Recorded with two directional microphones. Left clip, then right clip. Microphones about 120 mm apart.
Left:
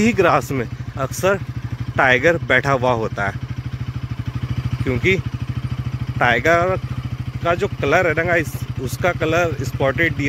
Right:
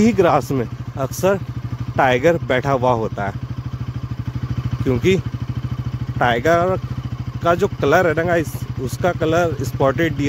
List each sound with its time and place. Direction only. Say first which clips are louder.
0.0 s speech: even; 25° right (ahead or behind)
4.8 s speech: right 1 dB; 45° right (ahead or behind)
6.1 s speech: left 1 dB; 25° right (ahead or behind)
7.4 s speech: right 2 dB; 50° right (ahead or behind)
8.2 s speech: even; 30° right (ahead or behind)
9.8 s speech: even; 50° right (ahead or behind)